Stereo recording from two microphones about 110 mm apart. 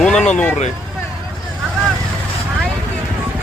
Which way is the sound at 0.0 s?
10° left (ahead or behind).